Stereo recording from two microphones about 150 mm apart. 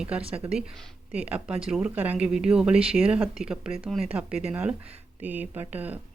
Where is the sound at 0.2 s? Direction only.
40° right (ahead or behind).